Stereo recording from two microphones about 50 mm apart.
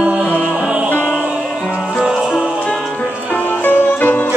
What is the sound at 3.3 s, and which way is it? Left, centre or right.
Music, left.